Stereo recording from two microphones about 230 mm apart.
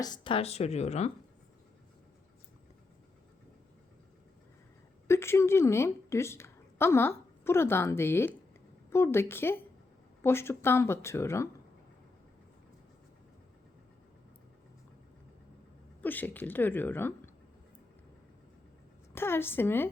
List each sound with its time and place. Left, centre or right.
0.0 s a woman's voice: centre
5.0 s a woman's voice: centre
16.0 s speech: centre
19.1 s speech: centre